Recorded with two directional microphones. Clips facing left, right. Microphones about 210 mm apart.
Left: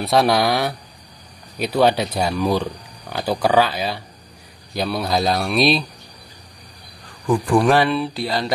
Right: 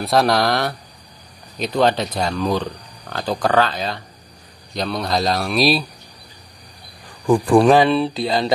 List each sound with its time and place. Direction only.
0.0 s a man's voice: centre (ahead or behind)
7.2 s speech: 25° right (ahead or behind)